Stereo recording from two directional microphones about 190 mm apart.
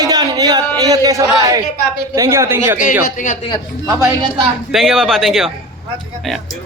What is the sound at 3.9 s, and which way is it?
Speech, 15° right (ahead or behind).